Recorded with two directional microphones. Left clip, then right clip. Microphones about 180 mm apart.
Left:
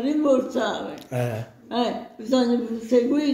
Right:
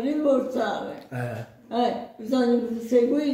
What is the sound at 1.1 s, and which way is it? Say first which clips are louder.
Speech: left 8 dB; 40° left (ahead or behind).